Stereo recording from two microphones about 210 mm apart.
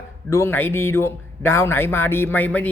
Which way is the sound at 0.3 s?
15° left (ahead or behind).